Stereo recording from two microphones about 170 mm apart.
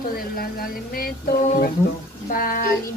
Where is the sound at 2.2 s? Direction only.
55° left (ahead or behind).